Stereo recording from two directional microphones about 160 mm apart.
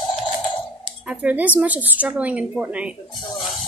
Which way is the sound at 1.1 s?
10° right (ahead or behind).